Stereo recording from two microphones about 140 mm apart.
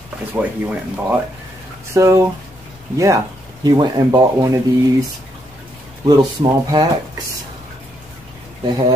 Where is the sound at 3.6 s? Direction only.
30° right (ahead or behind).